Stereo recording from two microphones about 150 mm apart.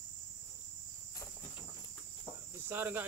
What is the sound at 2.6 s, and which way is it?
Speech, 15° right (ahead or behind).